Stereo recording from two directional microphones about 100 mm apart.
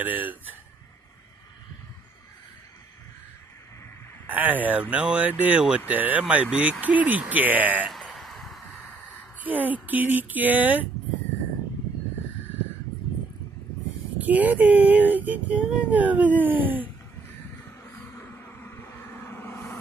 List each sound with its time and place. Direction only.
0.0 s speech: 15° right (ahead or behind)
4.3 s speech: 15° right (ahead or behind)
7.9 s a sound: centre (ahead or behind)
9.4 s speech: 15° right (ahead or behind)
14.1 s speech: 15° right (ahead or behind)
18.1 s vehicle: 20° left (ahead or behind)